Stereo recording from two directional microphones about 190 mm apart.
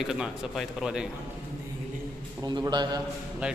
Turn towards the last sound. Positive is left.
turn(degrees=-5)  # may be behind; listen again after turning